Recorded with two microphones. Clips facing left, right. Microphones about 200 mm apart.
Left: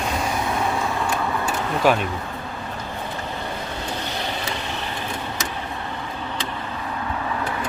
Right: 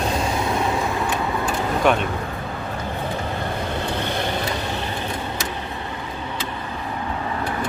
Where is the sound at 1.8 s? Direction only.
5° left (ahead or behind).